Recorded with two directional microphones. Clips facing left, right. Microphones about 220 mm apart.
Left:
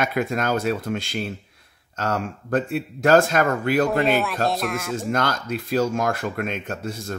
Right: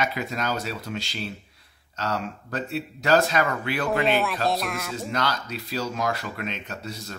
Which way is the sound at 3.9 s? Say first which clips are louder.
Left 2 dB; centre (ahead or behind).